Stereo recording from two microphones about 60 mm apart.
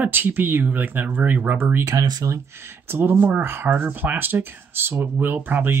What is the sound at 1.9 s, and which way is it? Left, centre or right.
Speech, right.